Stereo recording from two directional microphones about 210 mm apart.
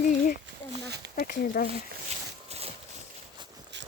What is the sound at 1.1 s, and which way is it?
Speech, 45° left (ahead or behind).